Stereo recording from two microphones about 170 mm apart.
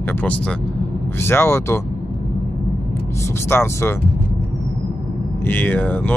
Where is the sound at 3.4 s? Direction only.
15° left (ahead or behind).